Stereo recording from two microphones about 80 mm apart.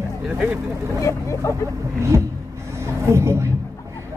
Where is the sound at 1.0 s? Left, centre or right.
Left.